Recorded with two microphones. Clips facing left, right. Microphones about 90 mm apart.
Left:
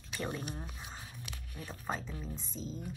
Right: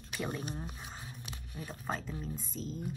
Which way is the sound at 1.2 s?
30° right (ahead or behind).